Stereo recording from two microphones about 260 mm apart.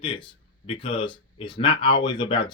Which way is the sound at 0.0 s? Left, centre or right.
Centre.